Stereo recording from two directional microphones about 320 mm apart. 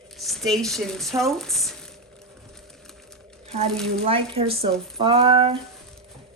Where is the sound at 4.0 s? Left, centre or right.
Centre.